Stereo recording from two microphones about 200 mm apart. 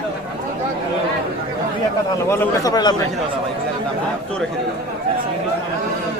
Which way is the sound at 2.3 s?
20° left (ahead or behind).